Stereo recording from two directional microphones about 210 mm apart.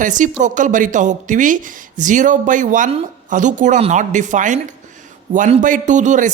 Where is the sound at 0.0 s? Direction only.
35° right (ahead or behind).